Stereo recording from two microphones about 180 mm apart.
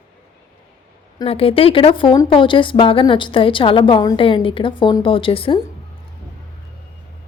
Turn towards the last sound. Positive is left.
turn(degrees=30)  # may be behind; listen again after turning